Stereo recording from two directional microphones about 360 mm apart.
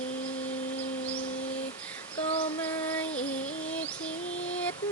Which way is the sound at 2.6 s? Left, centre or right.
Centre.